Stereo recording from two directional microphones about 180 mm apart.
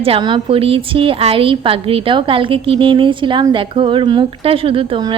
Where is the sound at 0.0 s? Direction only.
30° right (ahead or behind).